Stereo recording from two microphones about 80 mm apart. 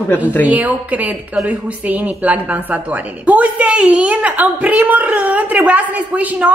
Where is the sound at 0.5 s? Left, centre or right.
Centre.